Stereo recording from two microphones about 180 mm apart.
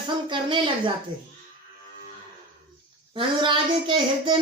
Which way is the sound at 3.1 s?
30° right (ahead or behind).